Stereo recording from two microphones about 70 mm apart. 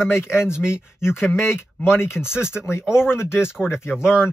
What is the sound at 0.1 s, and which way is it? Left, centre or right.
A man's voice, left.